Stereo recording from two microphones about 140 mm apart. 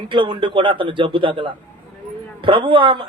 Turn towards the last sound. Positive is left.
turn(degrees=-35)  # may be behind; listen again after turning